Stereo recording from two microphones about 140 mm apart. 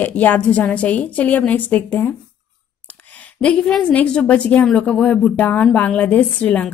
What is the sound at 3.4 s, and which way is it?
A woman's voice, 5° left (ahead or behind).